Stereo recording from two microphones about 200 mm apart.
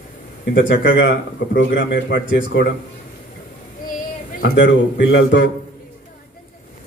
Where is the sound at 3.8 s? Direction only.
45° left (ahead or behind).